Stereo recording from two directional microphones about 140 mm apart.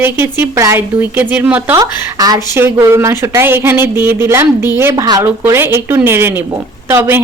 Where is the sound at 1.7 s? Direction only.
25° right (ahead or behind).